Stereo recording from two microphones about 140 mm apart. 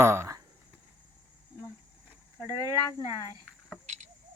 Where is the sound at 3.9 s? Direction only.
55° right (ahead or behind).